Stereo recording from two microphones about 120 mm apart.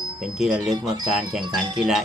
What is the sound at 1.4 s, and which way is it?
Speech, 35° right (ahead or behind).